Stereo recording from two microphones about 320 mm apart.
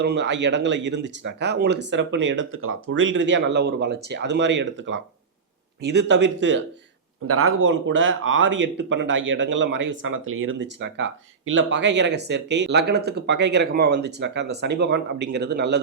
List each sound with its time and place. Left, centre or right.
0.0 s speech: right